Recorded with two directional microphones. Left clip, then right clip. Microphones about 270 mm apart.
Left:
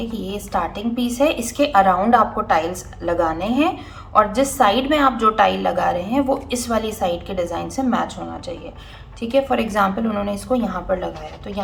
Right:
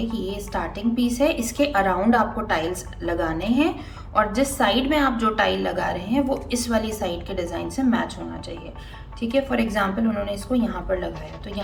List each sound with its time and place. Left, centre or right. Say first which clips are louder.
0.0 s a woman's voice: left 1 dB; left
9.2 s a woman's voice: left 4 dB; left